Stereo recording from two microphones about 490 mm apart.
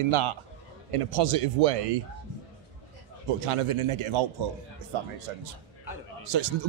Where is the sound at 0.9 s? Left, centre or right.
Right.